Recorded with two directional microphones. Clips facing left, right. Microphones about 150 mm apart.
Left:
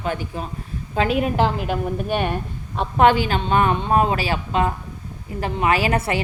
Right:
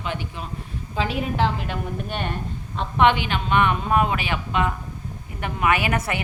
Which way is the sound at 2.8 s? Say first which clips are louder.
Left 3 dB; 40° left (ahead or behind).